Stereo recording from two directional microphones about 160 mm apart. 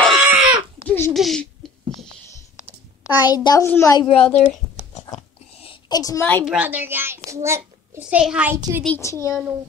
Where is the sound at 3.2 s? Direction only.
25° left (ahead or behind).